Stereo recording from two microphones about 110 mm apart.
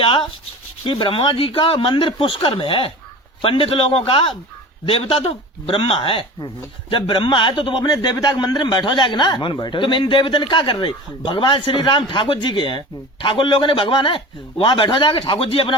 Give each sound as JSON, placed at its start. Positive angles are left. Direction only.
{"t": 0.0, "sound": "a man's voice", "side_deg": 50}